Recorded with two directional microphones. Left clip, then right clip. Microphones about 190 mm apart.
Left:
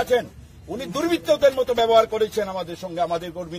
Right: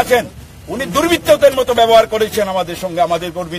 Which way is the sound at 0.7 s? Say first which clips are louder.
Right 9 dB; 25° right (ahead or behind).